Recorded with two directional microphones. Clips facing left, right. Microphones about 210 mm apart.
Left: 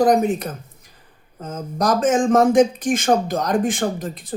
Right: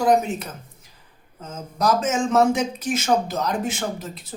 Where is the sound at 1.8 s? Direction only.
50° left (ahead or behind).